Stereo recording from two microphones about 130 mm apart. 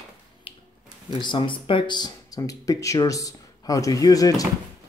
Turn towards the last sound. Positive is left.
turn(degrees=30)  # may be behind; listen again after turning